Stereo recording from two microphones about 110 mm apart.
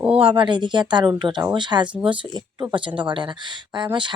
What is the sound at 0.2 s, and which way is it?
Speech, 50° right (ahead or behind).